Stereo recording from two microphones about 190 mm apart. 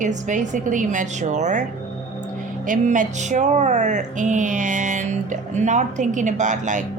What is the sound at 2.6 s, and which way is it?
A woman's voice, 45° right (ahead or behind).